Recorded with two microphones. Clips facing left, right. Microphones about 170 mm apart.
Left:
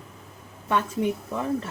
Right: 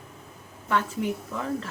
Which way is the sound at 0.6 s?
20° left (ahead or behind).